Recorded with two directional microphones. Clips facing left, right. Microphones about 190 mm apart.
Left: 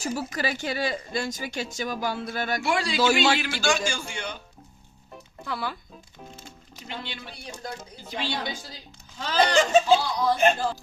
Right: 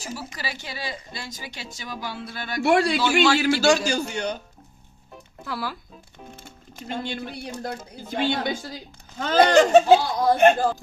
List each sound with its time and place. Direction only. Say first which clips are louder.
0.3 s speech: left 7 dB; 50° left (ahead or behind)
2.6 s a man's voice: right 10 dB; 60° right (ahead or behind)
3.3 s speech: right 7 dB; 45° right (ahead or behind)
5.1 s music: right 1 dB; centre (ahead or behind)
6.7 s a woman's voice: right 8 dB; 50° right (ahead or behind)